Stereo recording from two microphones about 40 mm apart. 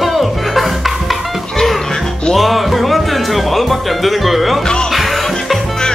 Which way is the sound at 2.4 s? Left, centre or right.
Centre.